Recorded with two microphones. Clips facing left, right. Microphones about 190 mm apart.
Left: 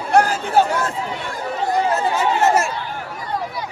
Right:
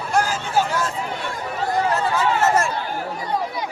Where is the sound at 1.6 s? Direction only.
20° left (ahead or behind).